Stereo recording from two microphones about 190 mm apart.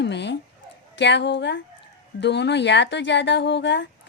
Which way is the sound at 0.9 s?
65° left (ahead or behind).